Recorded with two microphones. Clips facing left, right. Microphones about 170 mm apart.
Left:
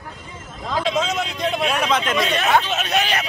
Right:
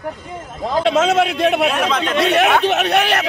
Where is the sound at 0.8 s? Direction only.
75° right (ahead or behind).